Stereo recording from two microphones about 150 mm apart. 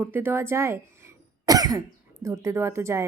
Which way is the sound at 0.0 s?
15° right (ahead or behind).